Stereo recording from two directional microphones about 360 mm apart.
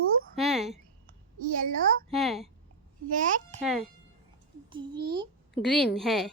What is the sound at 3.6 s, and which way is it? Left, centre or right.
Speech, centre.